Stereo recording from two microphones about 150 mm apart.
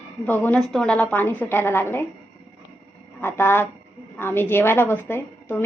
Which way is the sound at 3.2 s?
15° left (ahead or behind).